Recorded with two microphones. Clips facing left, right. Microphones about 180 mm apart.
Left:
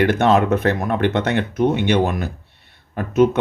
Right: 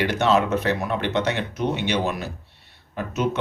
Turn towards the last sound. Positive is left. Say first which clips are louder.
# left 9 dB
turn(degrees=55)  # may be behind; listen again after turning